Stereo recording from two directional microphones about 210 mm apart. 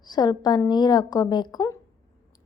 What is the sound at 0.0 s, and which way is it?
A woman's voice, 20° left (ahead or behind).